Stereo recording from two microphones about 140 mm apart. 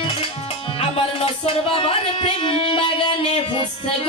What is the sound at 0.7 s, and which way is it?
Music, 40° left (ahead or behind).